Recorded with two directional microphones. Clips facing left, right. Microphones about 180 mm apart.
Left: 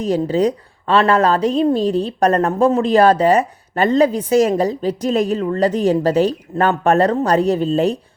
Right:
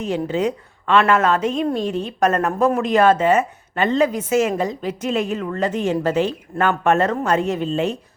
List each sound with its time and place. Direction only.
0.0 s speech: 35° left (ahead or behind)